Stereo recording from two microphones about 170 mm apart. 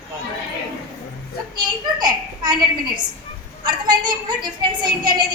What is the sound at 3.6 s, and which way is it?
A woman's voice, 25° right (ahead or behind).